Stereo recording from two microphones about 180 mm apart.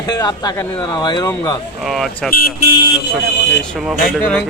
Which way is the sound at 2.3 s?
55° left (ahead or behind).